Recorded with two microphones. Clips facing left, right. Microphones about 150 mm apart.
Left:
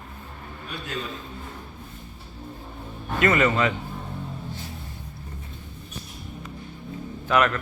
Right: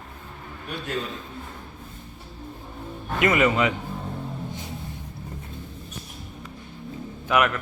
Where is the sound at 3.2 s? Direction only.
15° right (ahead or behind).